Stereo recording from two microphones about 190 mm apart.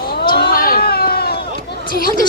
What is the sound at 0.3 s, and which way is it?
Run, 55° left (ahead or behind).